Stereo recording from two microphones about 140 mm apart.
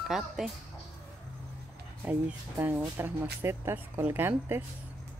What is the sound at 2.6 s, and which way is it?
Speech, 15° right (ahead or behind).